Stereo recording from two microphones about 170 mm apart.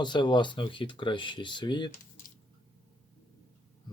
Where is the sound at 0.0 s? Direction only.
25° left (ahead or behind).